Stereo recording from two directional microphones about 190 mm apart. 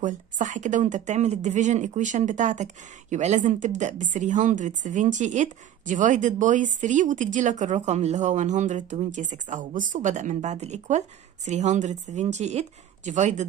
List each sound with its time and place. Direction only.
0.0 s speech: 40° right (ahead or behind)